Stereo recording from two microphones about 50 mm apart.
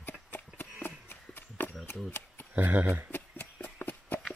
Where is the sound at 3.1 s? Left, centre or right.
Left.